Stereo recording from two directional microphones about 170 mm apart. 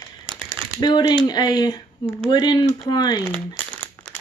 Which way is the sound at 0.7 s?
25° left (ahead or behind).